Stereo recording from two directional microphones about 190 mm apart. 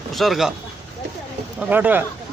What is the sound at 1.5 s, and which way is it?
Speech, 10° right (ahead or behind).